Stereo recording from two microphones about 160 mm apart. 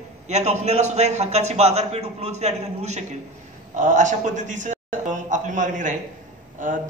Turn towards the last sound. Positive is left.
turn(degrees=-50)  # may be behind; listen again after turning